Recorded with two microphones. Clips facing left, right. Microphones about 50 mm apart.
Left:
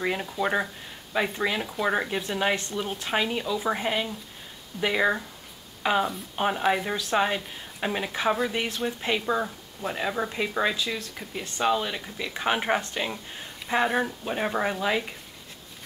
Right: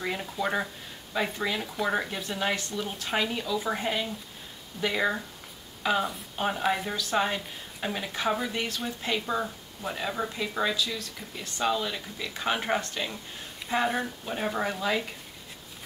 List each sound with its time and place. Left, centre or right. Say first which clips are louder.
0.0 s a woman's voice: left 3 dB; centre
5.8 s a sound: left 2 dB; left
6.3 s a woman's voice: left 3 dB; left